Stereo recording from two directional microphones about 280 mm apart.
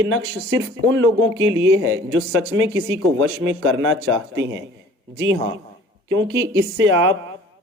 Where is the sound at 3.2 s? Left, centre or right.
Right.